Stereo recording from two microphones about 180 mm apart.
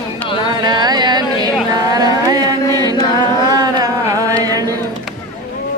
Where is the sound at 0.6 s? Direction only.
25° right (ahead or behind).